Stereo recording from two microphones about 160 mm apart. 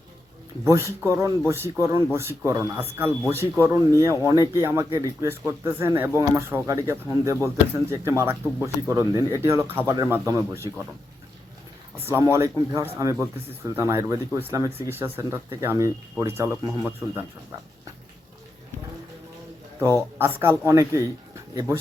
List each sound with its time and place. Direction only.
0.6 s speech: 15° right (ahead or behind)
12.0 s speech: 15° right (ahead or behind)
20.1 s speech: 15° right (ahead or behind)